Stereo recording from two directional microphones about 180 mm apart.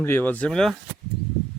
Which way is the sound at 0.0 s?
10° left (ahead or behind).